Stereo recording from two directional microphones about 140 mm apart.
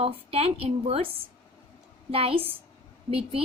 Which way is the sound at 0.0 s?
45° right (ahead or behind).